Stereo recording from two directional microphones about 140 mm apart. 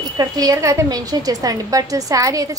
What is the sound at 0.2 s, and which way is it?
A woman's voice, 25° right (ahead or behind).